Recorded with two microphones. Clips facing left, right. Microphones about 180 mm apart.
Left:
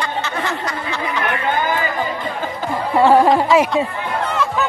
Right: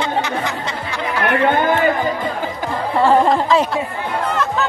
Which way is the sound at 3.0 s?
10° left (ahead or behind).